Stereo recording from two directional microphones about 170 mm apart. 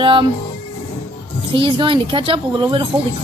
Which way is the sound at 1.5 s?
30° right (ahead or behind).